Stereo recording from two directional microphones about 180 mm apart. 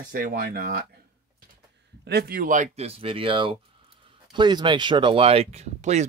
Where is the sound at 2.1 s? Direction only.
60° right (ahead or behind).